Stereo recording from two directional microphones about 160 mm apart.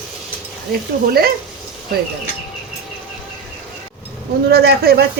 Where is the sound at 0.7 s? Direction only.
70° right (ahead or behind).